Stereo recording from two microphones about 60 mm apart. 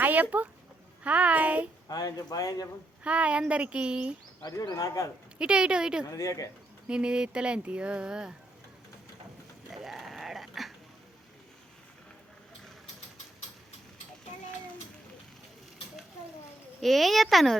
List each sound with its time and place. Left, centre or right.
0.0 s a sound: right
1.0 s speech: right
1.9 s speech: left
3.0 s speech: right
4.4 s speech: left
5.4 s speech: centre
6.1 s speech: left
6.8 s speech: centre
9.6 s a sound: centre
16.8 s speech: centre